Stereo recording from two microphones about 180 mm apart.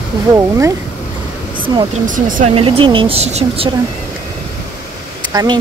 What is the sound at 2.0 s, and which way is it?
Speech, 45° right (ahead or behind).